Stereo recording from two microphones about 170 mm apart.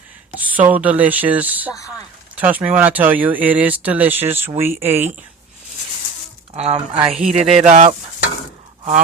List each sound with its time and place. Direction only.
0.3 s speech: 10° right (ahead or behind)
6.5 s speech: 40° right (ahead or behind)
7.3 s speech: 40° right (ahead or behind)